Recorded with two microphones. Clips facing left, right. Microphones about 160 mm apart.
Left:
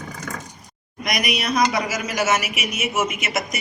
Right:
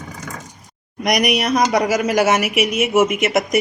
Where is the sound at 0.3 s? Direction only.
15° right (ahead or behind).